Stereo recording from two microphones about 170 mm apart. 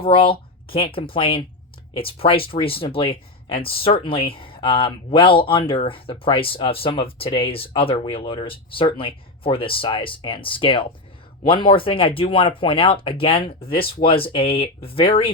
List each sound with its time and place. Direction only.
0.0 s speech: 30° left (ahead or behind)